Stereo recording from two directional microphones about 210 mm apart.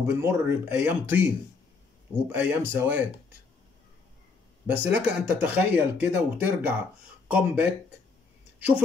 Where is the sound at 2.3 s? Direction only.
10° right (ahead or behind).